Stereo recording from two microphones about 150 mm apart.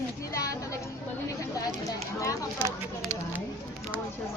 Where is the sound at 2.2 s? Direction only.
20° left (ahead or behind).